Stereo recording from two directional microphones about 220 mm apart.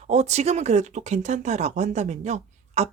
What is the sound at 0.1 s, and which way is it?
Speech, 30° right (ahead or behind).